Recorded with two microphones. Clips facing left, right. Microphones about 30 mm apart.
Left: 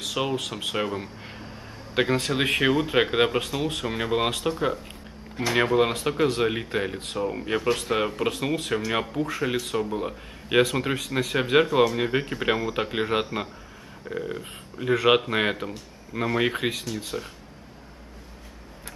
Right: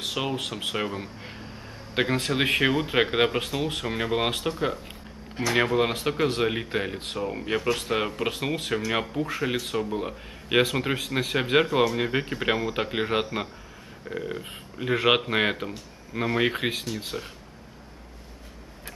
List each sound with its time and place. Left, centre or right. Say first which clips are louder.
0.1 s a man's voice: left 4 dB; centre
8.3 s speech: left 2 dB; centre
11.1 s speech: left 1 dB; right
11.3 s speech: left 2 dB; centre